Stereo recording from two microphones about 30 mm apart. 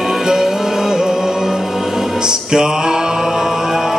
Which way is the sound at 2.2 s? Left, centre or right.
Right.